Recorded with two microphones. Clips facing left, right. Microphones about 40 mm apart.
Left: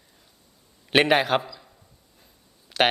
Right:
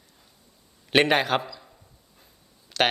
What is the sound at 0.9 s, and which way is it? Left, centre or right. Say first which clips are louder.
A man's voice: left 1 dB; centre.